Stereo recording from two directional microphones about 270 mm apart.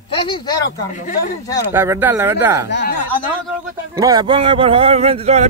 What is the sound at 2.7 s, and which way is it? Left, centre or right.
Speech, left.